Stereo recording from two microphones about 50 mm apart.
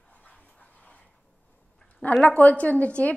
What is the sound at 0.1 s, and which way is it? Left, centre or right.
Dog, left.